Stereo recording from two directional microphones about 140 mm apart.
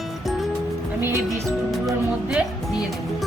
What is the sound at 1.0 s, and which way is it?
Speech, 15° right (ahead or behind).